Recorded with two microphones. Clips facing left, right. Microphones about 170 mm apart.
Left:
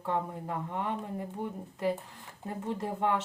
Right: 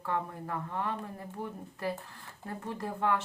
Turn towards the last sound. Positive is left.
turn(degrees=20)  # may be behind; listen again after turning